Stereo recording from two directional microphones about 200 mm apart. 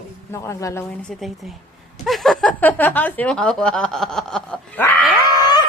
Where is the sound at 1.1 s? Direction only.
Centre (ahead or behind).